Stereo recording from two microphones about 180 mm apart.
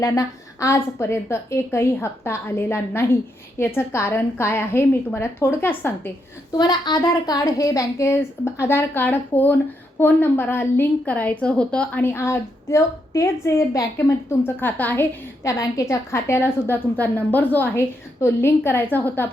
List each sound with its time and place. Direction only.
0.0 s a woman's voice: 15° left (ahead or behind)
6.6 s a woman's voice: 25° left (ahead or behind)